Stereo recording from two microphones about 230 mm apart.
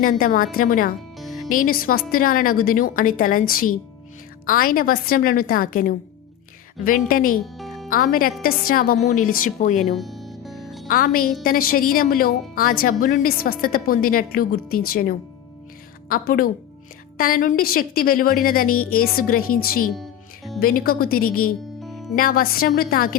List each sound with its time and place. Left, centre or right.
0.0 s a woman's voice: left
1.2 s music: centre
1.5 s a woman's voice: left
7.6 s music: centre
7.9 s a woman's voice: left
9.8 s music: centre
10.8 s a woman's voice: left
18.7 s speech: left
18.9 s a woman's voice: left
19.9 s music: centre
20.6 s a woman's voice: left